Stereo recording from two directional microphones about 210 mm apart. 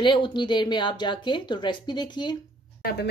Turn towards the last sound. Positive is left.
turn(degrees=50)  # may be behind; listen again after turning